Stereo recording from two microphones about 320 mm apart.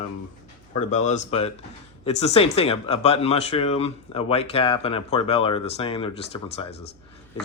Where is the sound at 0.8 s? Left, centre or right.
Left.